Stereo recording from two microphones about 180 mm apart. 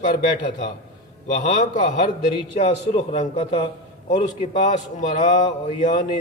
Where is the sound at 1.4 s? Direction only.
40° left (ahead or behind).